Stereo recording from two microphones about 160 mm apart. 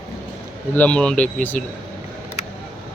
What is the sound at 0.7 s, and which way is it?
Speech, 10° left (ahead or behind).